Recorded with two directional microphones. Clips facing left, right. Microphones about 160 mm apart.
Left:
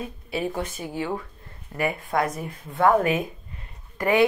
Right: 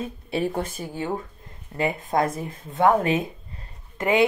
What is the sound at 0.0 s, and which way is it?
Speech, 30° right (ahead or behind).